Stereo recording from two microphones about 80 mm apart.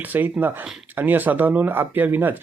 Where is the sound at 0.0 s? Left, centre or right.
Right.